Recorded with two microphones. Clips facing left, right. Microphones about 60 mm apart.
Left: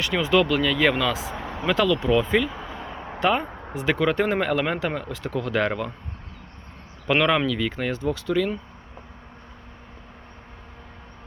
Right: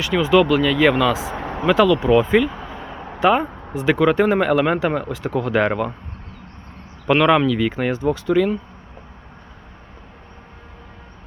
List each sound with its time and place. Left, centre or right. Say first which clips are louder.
0.0 s speech: right 5 dB; centre
1.3 s vehicle: right 5 dB; right
1.6 s speech: right 6 dB; centre
2.2 s a sound: right 5 dB; centre
3.2 s speech: right 6 dB; centre
7.1 s speech: right 6 dB; centre; by 8.4 s right